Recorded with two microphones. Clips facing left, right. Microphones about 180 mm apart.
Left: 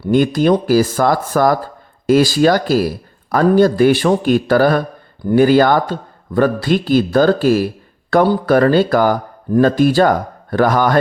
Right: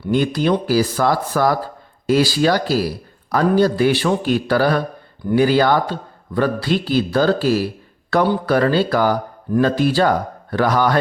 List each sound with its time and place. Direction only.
0.0 s speech: 45° left (ahead or behind)